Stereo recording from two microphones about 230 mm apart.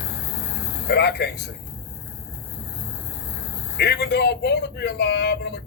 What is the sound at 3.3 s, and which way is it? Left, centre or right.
A man's voice, left.